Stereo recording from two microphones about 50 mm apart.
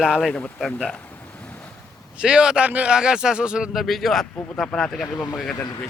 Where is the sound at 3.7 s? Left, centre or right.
Centre.